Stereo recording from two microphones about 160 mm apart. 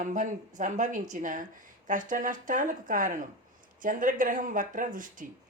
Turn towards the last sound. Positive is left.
turn(degrees=-55)  # may be behind; listen again after turning